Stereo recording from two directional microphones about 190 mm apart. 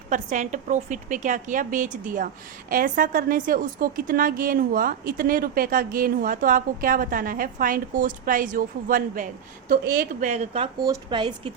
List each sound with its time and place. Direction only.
0.1 s a woman's voice: 40° right (ahead or behind)
10.2 s speech: 35° right (ahead or behind)
10.8 s speech: 25° right (ahead or behind)